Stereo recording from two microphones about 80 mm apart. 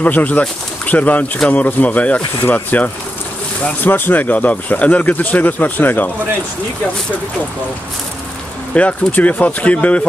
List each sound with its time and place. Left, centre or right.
0.0 s speech: centre
8.7 s speech: centre